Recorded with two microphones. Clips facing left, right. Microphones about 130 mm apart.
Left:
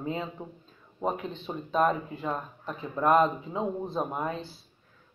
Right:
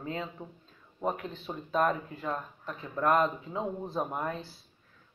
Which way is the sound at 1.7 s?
5° left (ahead or behind).